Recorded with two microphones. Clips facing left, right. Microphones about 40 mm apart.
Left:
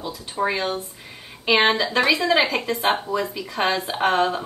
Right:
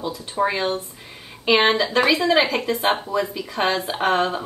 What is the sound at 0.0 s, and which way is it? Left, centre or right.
Speech, centre.